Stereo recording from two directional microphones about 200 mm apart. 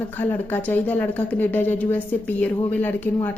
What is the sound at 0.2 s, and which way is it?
A woman's voice, 10° left (ahead or behind).